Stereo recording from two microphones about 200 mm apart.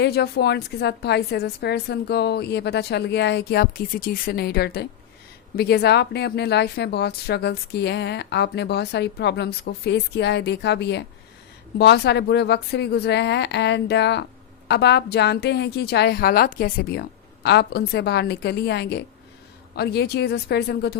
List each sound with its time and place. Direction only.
0.0 s a woman's voice: 55° left (ahead or behind)